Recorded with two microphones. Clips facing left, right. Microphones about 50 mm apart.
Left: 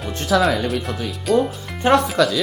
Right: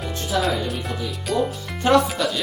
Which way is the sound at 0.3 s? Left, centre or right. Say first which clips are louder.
Left 5 dB; left.